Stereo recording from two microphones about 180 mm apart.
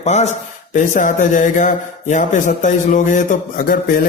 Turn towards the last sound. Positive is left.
turn(degrees=50)  # may be behind; listen again after turning